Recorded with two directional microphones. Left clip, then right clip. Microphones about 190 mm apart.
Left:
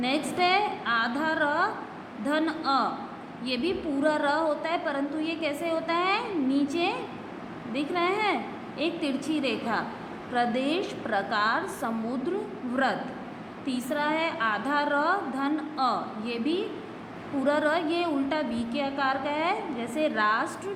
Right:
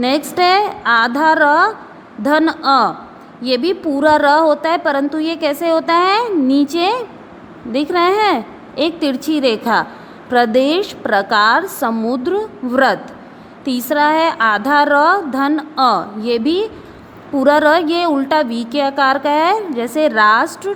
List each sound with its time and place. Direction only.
0.0 s a woman's voice: 60° right (ahead or behind)